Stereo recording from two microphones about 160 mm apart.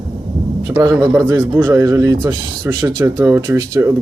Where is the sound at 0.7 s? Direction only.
20° right (ahead or behind).